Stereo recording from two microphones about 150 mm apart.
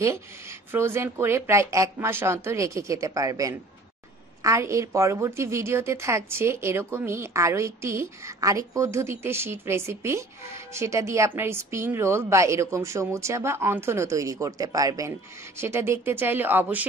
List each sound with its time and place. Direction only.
0.0 s speech: 20° right (ahead or behind)